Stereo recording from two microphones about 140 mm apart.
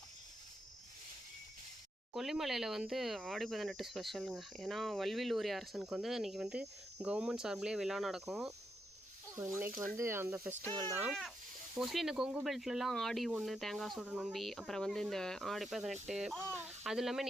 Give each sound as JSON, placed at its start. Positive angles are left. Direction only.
{"t": 2.1, "sound": "speech", "side_deg": 0}
{"t": 9.3, "sound": "speech", "side_deg": -20}
{"t": 11.0, "sound": "speech", "side_deg": 0}